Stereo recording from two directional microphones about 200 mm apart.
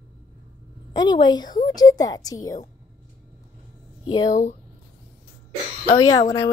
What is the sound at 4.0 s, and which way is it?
Speech, 20° left (ahead or behind).